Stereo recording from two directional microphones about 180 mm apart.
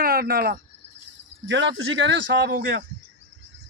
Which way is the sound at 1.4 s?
90° right.